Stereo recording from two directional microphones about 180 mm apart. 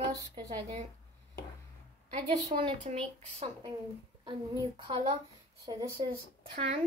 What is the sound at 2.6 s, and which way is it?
Speech, 30° right (ahead or behind).